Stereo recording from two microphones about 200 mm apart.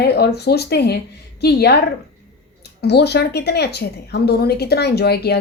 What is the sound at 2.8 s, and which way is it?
A woman's voice, 55° left (ahead or behind).